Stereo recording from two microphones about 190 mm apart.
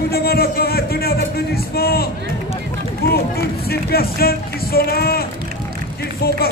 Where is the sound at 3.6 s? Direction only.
55° left (ahead or behind).